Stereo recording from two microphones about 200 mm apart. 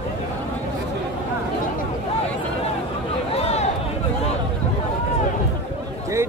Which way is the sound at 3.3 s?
30° left (ahead or behind).